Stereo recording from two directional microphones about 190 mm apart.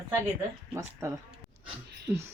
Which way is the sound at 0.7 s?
15° right (ahead or behind).